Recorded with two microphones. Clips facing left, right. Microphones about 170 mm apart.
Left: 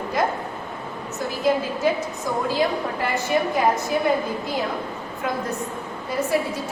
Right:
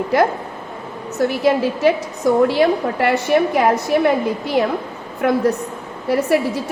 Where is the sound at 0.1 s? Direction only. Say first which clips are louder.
Right 8 dB; 80° right.